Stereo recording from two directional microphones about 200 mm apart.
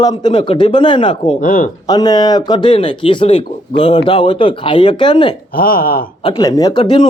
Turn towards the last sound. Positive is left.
turn(degrees=25)  # may be behind; listen again after turning